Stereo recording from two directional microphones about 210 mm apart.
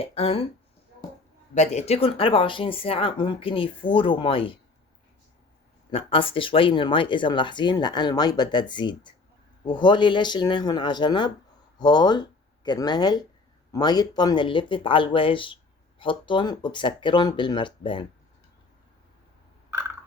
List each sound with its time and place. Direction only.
0.0 s speech: 30° left (ahead or behind)
1.5 s speech: 35° left (ahead or behind)
5.9 s speech: 25° left (ahead or behind)